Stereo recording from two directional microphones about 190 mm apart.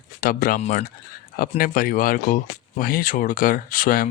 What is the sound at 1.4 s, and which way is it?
Speech, 50° left (ahead or behind).